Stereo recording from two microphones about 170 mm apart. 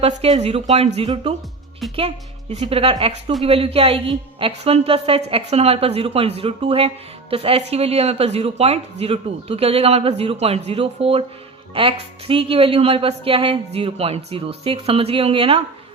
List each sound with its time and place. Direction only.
0.0 s a woman's voice: 40° right (ahead or behind)